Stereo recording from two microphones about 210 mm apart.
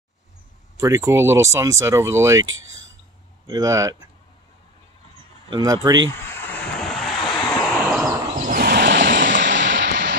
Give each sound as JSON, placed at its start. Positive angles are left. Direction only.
{"t": 0.7, "sound": "speech", "side_deg": -15}
{"t": 2.4, "sound": "speech", "side_deg": -65}
{"t": 3.4, "sound": "speech", "side_deg": -15}
{"t": 5.5, "sound": "speech", "side_deg": -15}
{"t": 6.0, "sound": "a sound", "side_deg": 5}
{"t": 8.5, "sound": "a sound", "side_deg": -45}
{"t": 9.3, "sound": "vehicle", "side_deg": -60}